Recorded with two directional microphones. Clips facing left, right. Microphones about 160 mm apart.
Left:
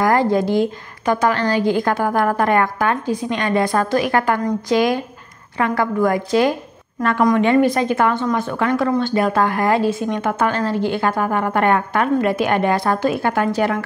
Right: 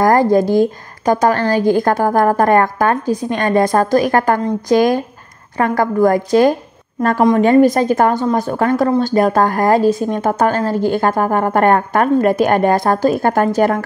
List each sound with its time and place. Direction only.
0.0 s a woman's voice: 45° right (ahead or behind)